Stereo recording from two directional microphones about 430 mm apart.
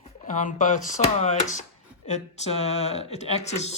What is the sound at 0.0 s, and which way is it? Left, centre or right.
Speech, centre.